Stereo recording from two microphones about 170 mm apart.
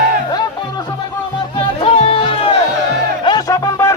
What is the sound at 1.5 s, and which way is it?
Music, 35° left (ahead or behind).